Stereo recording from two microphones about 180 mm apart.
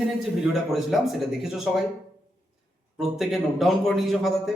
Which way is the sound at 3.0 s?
Centre (ahead or behind).